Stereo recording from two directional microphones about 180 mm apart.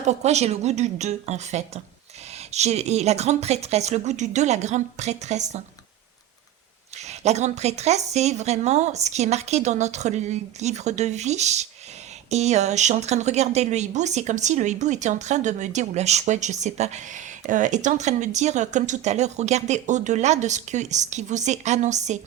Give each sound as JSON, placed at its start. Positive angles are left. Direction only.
{"t": 0.0, "sound": "a woman's voice", "side_deg": -40}
{"t": 7.1, "sound": "a woman's voice", "side_deg": -40}